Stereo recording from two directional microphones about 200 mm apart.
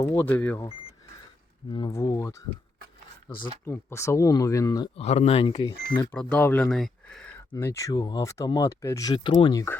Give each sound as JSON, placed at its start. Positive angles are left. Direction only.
{"t": 0.0, "sound": "speech", "side_deg": 15}
{"t": 1.7, "sound": "speech", "side_deg": 20}
{"t": 4.9, "sound": "speech", "side_deg": 30}
{"t": 6.0, "sound": "speech", "side_deg": 10}
{"t": 7.5, "sound": "speech", "side_deg": 15}